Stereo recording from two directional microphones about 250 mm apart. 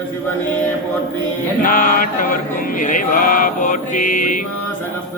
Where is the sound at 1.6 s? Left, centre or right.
Left.